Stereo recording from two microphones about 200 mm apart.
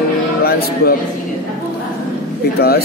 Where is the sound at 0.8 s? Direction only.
50° left (ahead or behind).